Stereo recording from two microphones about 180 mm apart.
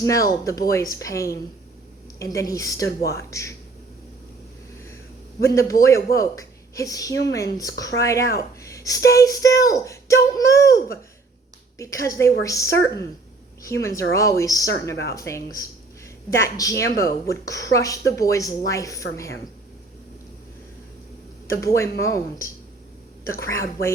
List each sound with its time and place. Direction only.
0.0 s speech: 20° left (ahead or behind)
3.0 s speech: 60° left (ahead or behind)
3.2 s speech: 15° left (ahead or behind)
5.4 s speech: 15° left (ahead or behind)
21.6 s speech: 15° left (ahead or behind)